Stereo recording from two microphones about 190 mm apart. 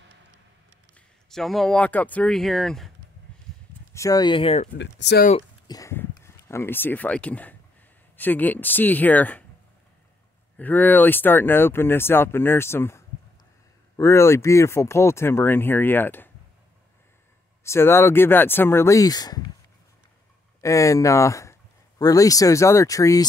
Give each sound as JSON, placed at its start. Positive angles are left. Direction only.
{"t": 0.9, "sound": "speech", "side_deg": 0}
{"t": 3.9, "sound": "speech", "side_deg": 20}
{"t": 4.7, "sound": "speech", "side_deg": 65}
{"t": 5.7, "sound": "speech", "side_deg": 15}
{"t": 10.6, "sound": "speech", "side_deg": 10}
{"t": 17.6, "sound": "speech", "side_deg": 15}
{"t": 20.6, "sound": "speech", "side_deg": 15}